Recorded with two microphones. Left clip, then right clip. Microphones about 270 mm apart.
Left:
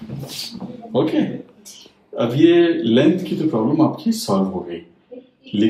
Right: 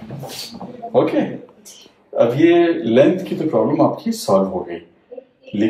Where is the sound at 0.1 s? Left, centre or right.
Centre.